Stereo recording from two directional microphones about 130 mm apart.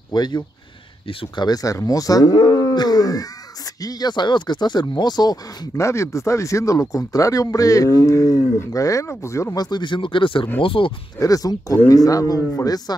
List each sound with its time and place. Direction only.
0.1 s speech: 35° left (ahead or behind)
11.1 s speech: 25° left (ahead or behind)